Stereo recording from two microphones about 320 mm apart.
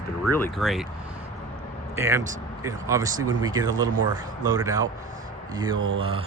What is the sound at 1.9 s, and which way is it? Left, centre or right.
Speech, centre.